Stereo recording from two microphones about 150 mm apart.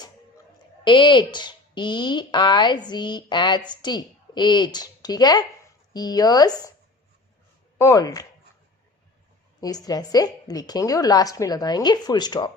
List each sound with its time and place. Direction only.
0.9 s a woman's voice: 30° left (ahead or behind)
7.8 s a woman's voice: 20° left (ahead or behind)
9.6 s a woman's voice: 25° left (ahead or behind)